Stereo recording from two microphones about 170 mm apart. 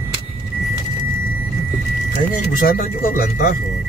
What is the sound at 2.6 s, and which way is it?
Speech, 55° left (ahead or behind).